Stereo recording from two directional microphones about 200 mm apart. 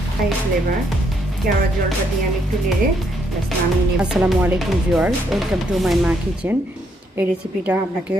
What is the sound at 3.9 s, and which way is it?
A woman's voice, 5° right (ahead or behind).